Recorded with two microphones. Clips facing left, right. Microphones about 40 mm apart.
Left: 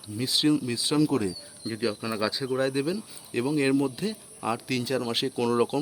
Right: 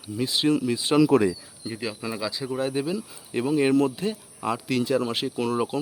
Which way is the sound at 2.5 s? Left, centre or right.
Centre.